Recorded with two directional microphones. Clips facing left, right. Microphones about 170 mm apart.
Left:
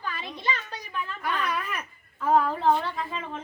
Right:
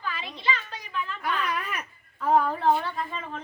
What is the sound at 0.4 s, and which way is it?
Speech, 40° left (ahead or behind).